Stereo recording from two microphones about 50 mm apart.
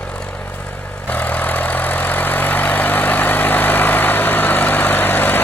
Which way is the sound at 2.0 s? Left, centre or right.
Left.